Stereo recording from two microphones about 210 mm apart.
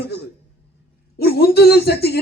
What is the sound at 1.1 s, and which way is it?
A man's voice, 50° left (ahead or behind).